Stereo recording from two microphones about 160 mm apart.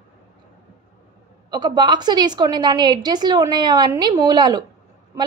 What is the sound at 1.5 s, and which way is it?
A woman's voice, 25° right (ahead or behind).